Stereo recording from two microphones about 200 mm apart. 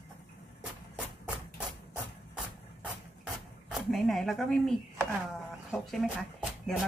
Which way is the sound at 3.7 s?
Centre (ahead or behind).